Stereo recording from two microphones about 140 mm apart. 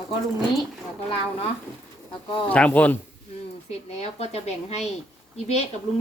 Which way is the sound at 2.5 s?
10° left (ahead or behind).